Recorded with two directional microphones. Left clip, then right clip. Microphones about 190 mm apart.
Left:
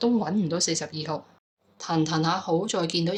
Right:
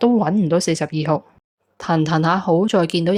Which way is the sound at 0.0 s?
50° right (ahead or behind).